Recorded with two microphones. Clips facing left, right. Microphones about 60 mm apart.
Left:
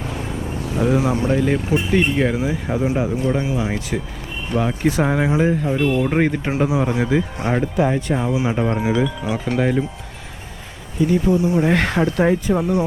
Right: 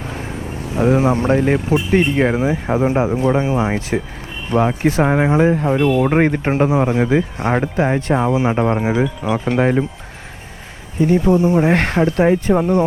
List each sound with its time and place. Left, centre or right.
0.0 s vehicle: right
1.9 s speech: right
6.9 s speech: right
10.9 s speech: right